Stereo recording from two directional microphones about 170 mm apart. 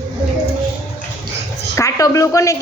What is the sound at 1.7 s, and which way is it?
Speech, 20° left (ahead or behind).